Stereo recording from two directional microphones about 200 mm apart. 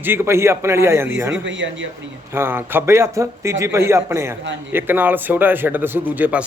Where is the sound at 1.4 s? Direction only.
70° right (ahead or behind).